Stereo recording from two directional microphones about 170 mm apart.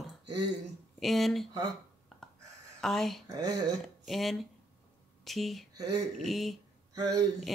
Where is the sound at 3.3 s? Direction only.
20° right (ahead or behind).